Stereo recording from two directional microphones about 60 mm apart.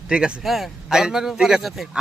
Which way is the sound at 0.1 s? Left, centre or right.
Centre.